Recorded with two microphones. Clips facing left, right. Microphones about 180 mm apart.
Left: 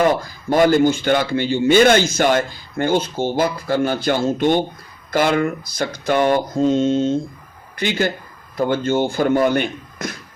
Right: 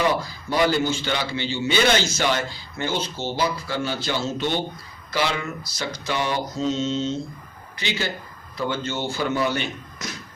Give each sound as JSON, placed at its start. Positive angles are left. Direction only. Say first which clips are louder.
{"t": 0.0, "sound": "a man's voice", "louder": "left 5 dB", "side_deg": 50}